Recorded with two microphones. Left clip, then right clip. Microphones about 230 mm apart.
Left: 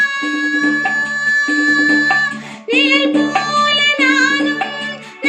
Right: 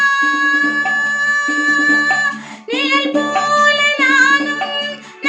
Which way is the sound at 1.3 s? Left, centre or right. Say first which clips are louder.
Left 1 dB; centre.